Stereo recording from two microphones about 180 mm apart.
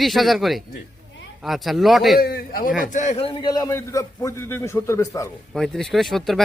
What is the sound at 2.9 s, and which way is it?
Speech, 45° left (ahead or behind).